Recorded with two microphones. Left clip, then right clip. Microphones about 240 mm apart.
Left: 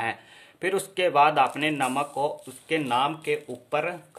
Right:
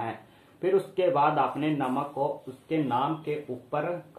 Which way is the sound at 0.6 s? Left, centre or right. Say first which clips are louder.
Right 1 dB; left.